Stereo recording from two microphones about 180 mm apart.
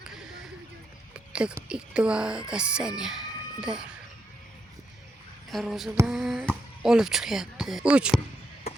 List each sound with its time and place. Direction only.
1.1 s speech: 5° right (ahead or behind)
5.5 s speech: centre (ahead or behind)